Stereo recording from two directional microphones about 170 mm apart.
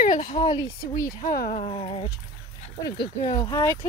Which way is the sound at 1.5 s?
30° left (ahead or behind).